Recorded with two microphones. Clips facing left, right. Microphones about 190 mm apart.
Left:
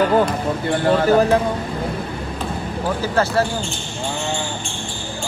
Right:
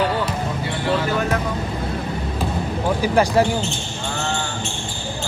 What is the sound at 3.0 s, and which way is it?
Speech, 15° right (ahead or behind).